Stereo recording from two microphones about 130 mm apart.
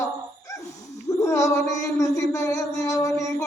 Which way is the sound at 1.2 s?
20° left (ahead or behind).